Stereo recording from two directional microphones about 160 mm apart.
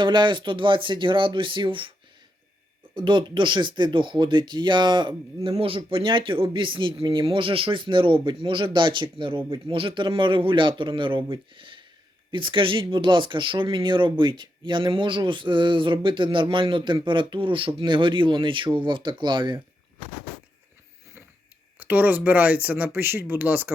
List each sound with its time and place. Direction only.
0.0 s speech: 30° right (ahead or behind)
2.9 s speech: 30° right (ahead or behind)
21.8 s speech: 10° right (ahead or behind)